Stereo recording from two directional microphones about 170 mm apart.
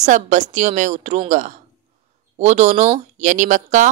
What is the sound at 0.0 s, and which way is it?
Speech, 45° right (ahead or behind).